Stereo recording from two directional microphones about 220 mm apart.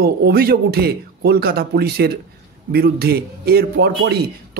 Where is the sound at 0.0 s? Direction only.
45° right (ahead or behind).